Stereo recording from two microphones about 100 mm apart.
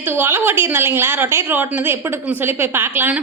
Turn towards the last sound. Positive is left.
turn(degrees=-20)  # may be behind; listen again after turning